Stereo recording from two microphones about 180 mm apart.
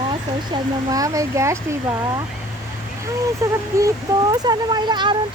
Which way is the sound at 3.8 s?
20° right (ahead or behind).